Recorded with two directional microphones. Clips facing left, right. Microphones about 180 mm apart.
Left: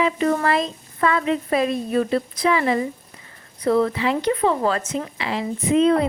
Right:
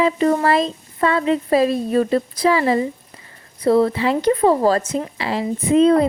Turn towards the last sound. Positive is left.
turn(degrees=-35)  # may be behind; listen again after turning